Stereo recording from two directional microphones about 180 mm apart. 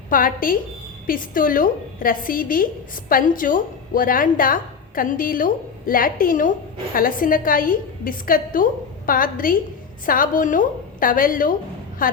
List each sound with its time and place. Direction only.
0.1 s a woman's voice: 50° left (ahead or behind)